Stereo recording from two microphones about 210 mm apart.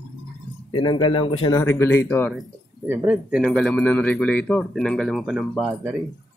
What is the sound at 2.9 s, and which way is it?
Speech, 10° right (ahead or behind).